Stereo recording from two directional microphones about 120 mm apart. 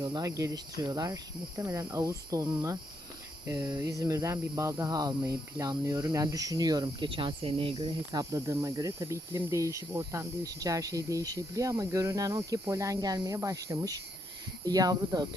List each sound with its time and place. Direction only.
0.0 s speech: 30° right (ahead or behind); by 7.9 s 50° right (ahead or behind)
8.1 s speech: 30° right (ahead or behind)